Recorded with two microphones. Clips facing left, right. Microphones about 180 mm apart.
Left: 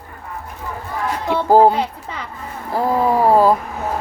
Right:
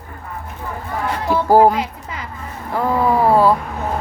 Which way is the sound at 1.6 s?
30° left (ahead or behind).